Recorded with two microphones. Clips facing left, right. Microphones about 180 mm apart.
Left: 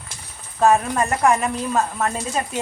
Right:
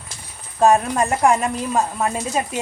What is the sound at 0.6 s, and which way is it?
Speech, 15° right (ahead or behind).